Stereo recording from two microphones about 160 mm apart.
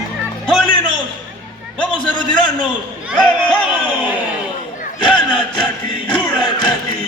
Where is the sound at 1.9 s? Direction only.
30° left (ahead or behind).